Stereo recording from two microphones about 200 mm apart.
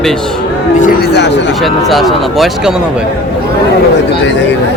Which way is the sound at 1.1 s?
60° left (ahead or behind).